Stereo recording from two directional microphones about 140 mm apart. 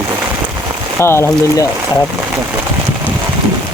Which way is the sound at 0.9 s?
20° left (ahead or behind).